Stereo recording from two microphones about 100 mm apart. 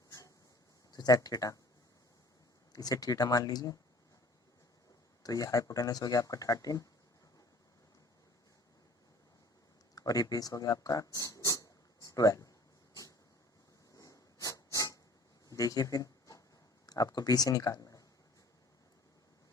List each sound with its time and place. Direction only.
0.9 s speech: 40° left (ahead or behind)
2.7 s speech: 40° left (ahead or behind)
5.2 s speech: 35° left (ahead or behind)
9.9 s speech: 35° left (ahead or behind)
13.9 s a sound: 35° left (ahead or behind)
16.8 s speech: 40° left (ahead or behind)